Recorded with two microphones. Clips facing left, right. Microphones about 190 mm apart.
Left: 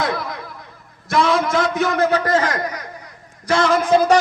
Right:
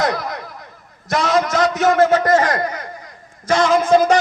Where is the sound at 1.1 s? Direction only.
45° right (ahead or behind).